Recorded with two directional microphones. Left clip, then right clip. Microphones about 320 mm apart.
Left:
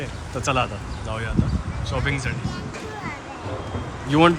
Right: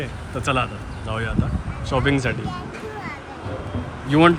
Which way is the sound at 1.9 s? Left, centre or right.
Centre.